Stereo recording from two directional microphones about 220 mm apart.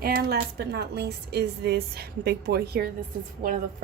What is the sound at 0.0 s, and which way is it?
A woman's voice, 45° right (ahead or behind).